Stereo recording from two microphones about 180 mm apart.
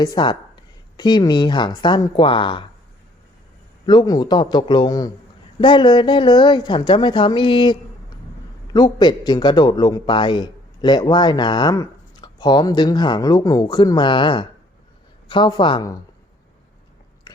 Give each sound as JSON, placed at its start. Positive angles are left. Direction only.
{"t": 0.0, "sound": "speech", "side_deg": 25}
{"t": 3.8, "sound": "a man's voice", "side_deg": 20}
{"t": 17.3, "sound": "biting", "side_deg": 25}